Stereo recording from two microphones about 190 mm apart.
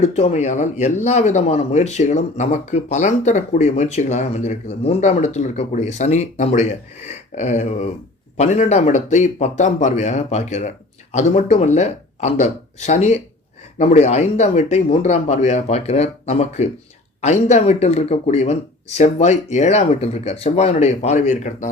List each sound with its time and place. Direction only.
0.0 s speech: 35° left (ahead or behind)